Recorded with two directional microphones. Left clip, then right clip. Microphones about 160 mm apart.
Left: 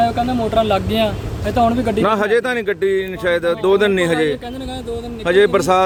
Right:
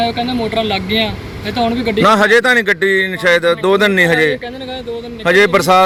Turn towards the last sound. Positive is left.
turn(degrees=-5)  # may be behind; listen again after turning